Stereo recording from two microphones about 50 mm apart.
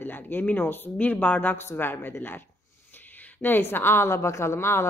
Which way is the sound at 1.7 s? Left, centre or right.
Left.